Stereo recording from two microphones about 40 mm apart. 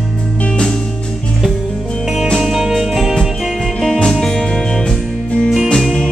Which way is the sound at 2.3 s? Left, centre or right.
Centre.